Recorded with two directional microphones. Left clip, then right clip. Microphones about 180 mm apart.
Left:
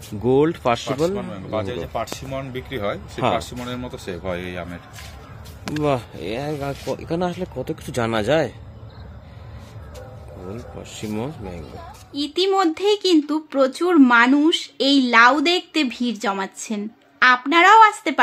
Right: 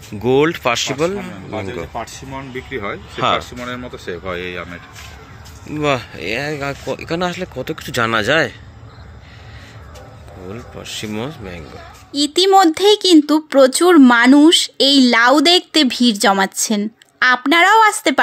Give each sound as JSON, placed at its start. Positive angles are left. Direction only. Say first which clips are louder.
{"t": 0.2, "sound": "a man's voice", "louder": "right 3 dB", "side_deg": 5}
{"t": 2.3, "sound": "speech", "louder": "right 4 dB", "side_deg": 75}
{"t": 3.3, "sound": "speech", "louder": "right 3 dB", "side_deg": 90}
{"t": 5.8, "sound": "speech", "louder": "right 4 dB", "side_deg": 5}
{"t": 10.5, "sound": "speech", "louder": "right 8 dB", "side_deg": 5}
{"t": 12.1, "sound": "speech", "louder": "right 8 dB", "side_deg": -40}